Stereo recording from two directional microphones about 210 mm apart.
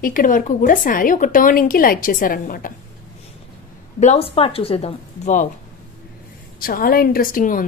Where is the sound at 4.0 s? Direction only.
30° left (ahead or behind).